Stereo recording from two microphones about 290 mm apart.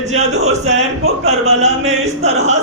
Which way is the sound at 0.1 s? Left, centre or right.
Right.